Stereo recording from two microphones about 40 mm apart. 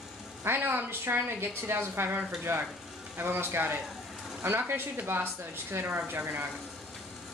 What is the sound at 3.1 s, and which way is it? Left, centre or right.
Speech, right.